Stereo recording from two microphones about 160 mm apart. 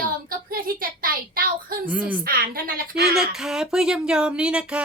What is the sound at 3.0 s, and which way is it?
Speech, centre (ahead or behind).